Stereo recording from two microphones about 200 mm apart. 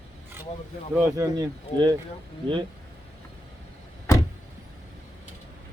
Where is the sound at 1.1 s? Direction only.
20° right (ahead or behind).